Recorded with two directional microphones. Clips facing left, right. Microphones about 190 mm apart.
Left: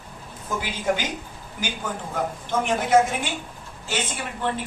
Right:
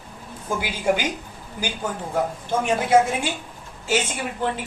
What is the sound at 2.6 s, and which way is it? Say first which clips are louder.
Speech: right 1 dB; 10° right (ahead or behind).